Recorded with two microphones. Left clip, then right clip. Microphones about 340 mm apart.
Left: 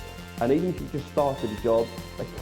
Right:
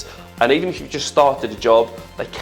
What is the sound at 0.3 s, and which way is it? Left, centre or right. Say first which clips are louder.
Speech: right 8 dB; centre.